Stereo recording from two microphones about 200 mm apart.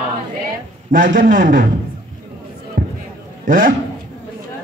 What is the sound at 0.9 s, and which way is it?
Speech, 40° right (ahead or behind).